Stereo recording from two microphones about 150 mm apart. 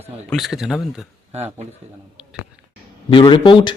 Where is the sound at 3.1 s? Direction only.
35° left (ahead or behind).